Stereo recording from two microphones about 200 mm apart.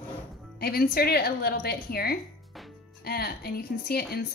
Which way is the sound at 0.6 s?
50° left (ahead or behind).